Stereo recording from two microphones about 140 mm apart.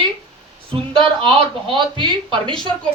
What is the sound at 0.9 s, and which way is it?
Speech, 35° right (ahead or behind).